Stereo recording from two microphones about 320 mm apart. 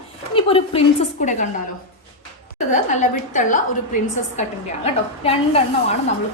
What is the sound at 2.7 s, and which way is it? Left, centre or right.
A woman's voice, left.